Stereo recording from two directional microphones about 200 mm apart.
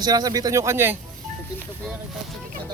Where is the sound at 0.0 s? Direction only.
20° right (ahead or behind).